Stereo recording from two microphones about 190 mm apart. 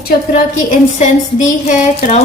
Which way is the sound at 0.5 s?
40° left (ahead or behind).